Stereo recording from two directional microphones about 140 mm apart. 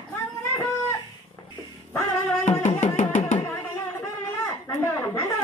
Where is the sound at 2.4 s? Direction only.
55° left (ahead or behind).